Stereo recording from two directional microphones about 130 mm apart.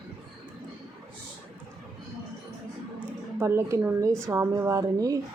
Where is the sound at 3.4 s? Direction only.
20° right (ahead or behind).